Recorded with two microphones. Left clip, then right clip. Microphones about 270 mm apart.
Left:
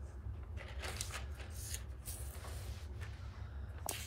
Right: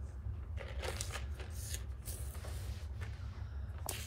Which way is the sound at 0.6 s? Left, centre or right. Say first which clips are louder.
Right 2 dB; right.